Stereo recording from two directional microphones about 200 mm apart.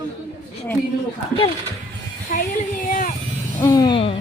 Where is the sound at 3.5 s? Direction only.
15° left (ahead or behind).